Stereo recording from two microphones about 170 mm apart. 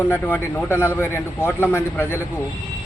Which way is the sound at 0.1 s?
10° left (ahead or behind).